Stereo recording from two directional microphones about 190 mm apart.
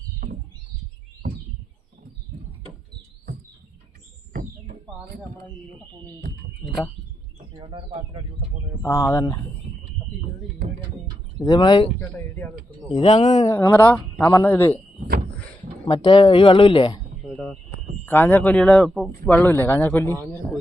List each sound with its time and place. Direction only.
4.3 s bird: 45° right (ahead or behind)
7.5 s speech: 25° right (ahead or behind)
8.8 s speech: 15° left (ahead or behind)
11.4 s speech: 20° left (ahead or behind)
11.9 s speech: 10° left (ahead or behind)
12.9 s speech: 35° left (ahead or behind)
13.5 s speech: 15° left (ahead or behind)
15.9 s speech: 25° left (ahead or behind)
17.3 s a sound: centre (ahead or behind)
18.0 s speech: 10° left (ahead or behind)